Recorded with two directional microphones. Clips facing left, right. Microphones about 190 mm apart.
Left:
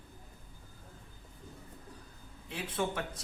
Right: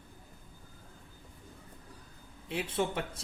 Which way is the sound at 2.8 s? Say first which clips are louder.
Right 1 dB; 25° right (ahead or behind).